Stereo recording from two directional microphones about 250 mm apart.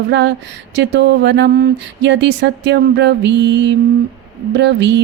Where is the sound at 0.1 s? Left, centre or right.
Right.